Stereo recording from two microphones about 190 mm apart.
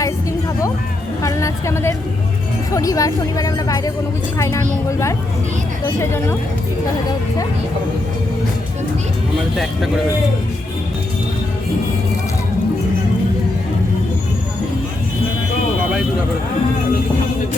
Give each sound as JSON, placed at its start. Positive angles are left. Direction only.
{"t": 1.2, "sound": "speech", "side_deg": 15}
{"t": 9.6, "sound": "speech", "side_deg": 0}